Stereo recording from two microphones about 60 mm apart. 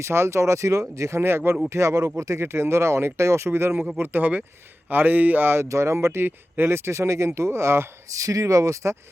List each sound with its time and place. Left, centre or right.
0.0 s speech: right
1.7 s speech: right
5.6 s speech: right
8.1 s speech: right